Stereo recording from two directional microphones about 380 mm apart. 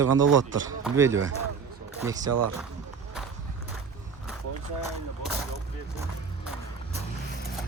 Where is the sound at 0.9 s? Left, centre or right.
Centre.